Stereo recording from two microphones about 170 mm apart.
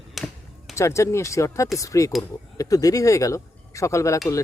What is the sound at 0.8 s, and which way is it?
Speech, 15° left (ahead or behind).